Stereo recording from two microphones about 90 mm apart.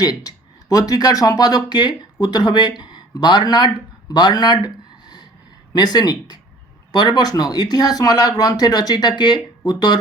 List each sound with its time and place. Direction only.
0.0 s speech: 45° left (ahead or behind)